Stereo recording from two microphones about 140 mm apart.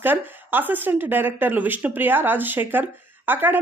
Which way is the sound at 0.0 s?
15° right (ahead or behind).